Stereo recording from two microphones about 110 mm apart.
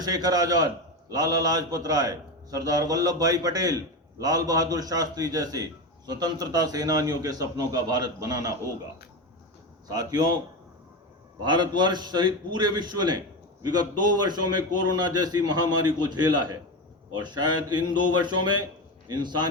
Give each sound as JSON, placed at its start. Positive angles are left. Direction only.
{"t": 0.0, "sound": "a man's voice", "side_deg": -35}
{"t": 9.9, "sound": "a man's voice", "side_deg": -35}
{"t": 11.4, "sound": "a man's voice", "side_deg": -45}